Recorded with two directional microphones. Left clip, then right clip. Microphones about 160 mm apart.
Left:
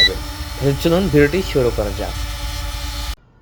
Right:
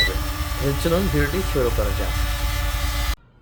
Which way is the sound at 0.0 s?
10° right (ahead or behind).